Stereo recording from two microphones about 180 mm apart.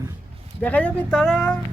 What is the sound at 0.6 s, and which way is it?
Speech, 10° left (ahead or behind).